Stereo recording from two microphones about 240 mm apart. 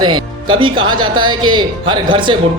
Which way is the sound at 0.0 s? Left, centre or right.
Centre.